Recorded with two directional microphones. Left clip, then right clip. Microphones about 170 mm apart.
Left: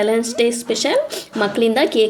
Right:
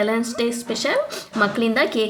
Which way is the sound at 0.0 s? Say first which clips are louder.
Left 5 dB; 15° left (ahead or behind).